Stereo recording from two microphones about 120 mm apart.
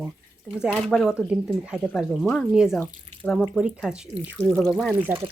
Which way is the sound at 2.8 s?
10° left (ahead or behind).